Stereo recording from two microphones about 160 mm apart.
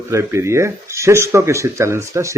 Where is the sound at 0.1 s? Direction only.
20° right (ahead or behind).